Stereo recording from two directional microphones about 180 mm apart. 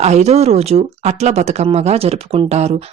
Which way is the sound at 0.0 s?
40° right (ahead or behind).